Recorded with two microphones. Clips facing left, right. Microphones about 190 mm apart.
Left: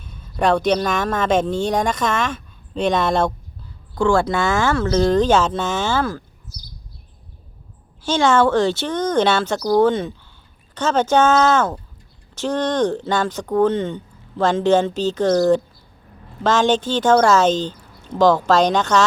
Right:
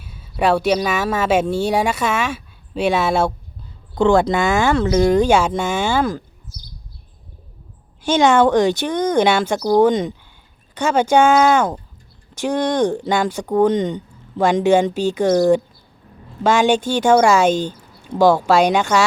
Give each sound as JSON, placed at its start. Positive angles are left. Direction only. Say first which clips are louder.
{"t": 0.0, "sound": "speech", "louder": "right 1 dB", "side_deg": -5}
{"t": 3.9, "sound": "speech", "louder": "right 3 dB", "side_deg": -20}
{"t": 8.0, "sound": "speech", "louder": "right 2 dB", "side_deg": -15}